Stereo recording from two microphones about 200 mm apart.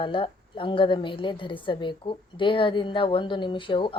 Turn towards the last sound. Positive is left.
turn(degrees=25)  # may be behind; listen again after turning